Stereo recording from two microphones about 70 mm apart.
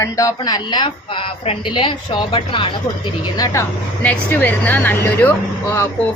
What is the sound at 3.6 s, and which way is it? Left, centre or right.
Speech, left.